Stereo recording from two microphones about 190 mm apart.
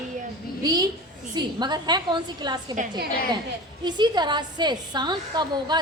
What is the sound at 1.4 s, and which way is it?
A woman's voice, 25° right (ahead or behind).